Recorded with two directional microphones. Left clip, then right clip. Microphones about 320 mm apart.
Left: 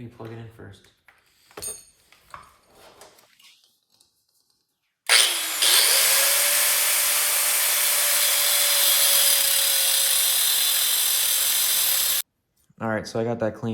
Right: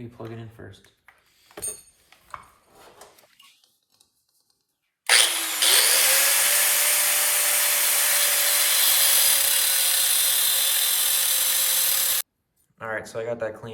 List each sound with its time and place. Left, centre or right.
0.2 s speech: centre
1.0 s a sound: centre
2.0 s chopping: centre
5.0 s drill: centre
12.8 s speech: centre